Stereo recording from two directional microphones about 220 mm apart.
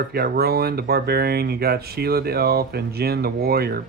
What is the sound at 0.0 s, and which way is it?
Speech, 45° right (ahead or behind).